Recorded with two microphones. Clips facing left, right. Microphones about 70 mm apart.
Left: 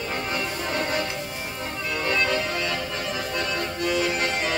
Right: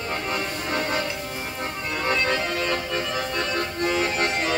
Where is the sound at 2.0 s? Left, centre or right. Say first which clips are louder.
Right 1 dB; right.